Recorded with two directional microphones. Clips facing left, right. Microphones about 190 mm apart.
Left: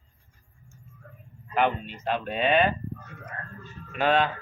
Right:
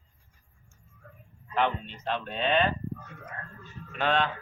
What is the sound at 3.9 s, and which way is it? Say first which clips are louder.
Speech: left 4 dB; 5° left (ahead or behind).